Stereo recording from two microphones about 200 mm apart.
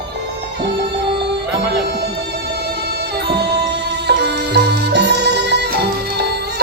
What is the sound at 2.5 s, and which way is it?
Music, 55° right (ahead or behind).